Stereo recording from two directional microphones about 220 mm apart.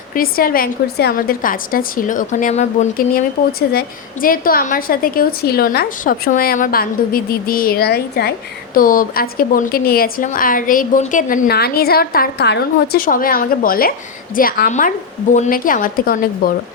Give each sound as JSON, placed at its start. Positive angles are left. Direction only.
{"t": 0.1, "sound": "a woman's voice", "side_deg": 40}
{"t": 3.7, "sound": "a woman's voice", "side_deg": 40}